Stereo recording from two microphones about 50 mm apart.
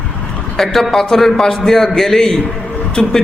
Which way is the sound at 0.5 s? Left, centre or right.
Centre.